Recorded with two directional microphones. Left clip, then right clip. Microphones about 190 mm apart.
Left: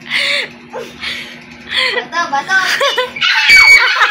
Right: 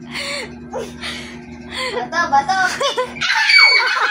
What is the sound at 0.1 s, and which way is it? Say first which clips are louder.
Music: left 11 dB; 5° right (ahead or behind).